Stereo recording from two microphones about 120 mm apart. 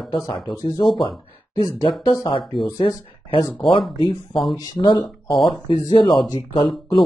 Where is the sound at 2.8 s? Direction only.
45° left (ahead or behind).